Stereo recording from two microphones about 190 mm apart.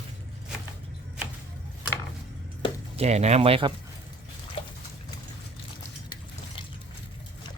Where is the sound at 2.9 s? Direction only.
35° right (ahead or behind).